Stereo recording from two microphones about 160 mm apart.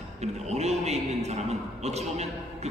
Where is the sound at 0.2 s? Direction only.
45° right (ahead or behind).